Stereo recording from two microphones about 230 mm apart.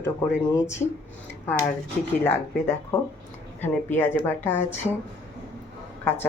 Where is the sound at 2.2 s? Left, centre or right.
Centre.